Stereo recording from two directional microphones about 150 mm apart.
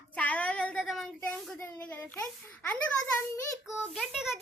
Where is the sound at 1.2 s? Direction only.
10° left (ahead or behind).